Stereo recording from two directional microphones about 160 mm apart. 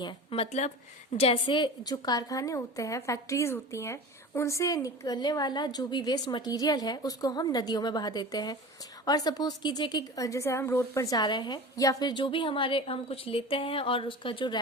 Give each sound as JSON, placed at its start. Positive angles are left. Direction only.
{"t": 0.0, "sound": "a woman's voice", "side_deg": 30}